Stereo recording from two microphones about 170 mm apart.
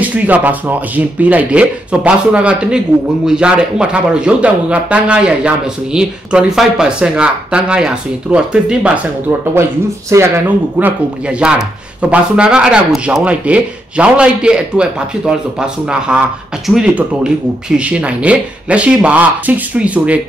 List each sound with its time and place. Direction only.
0.0 s speech: 10° right (ahead or behind)